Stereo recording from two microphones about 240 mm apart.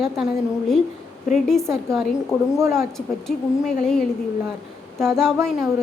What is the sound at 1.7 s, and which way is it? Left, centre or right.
Speech, centre.